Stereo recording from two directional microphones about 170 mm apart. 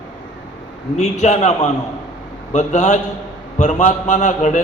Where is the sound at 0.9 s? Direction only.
40° left (ahead or behind).